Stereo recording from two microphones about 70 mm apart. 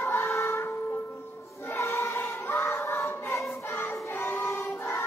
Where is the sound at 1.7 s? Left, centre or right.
Left.